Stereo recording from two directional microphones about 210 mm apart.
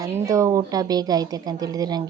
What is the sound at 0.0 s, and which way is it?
A woman's voice, 15° right (ahead or behind).